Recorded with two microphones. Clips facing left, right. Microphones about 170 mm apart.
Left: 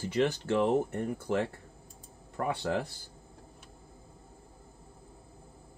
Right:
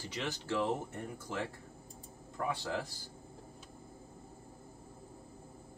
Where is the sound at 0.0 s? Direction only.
55° left (ahead or behind).